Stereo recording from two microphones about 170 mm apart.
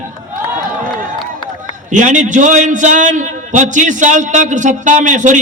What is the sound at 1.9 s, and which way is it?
A man's voice, 50° right (ahead or behind).